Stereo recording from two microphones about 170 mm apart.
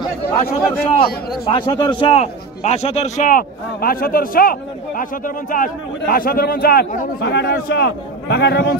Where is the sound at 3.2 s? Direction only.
55° left (ahead or behind).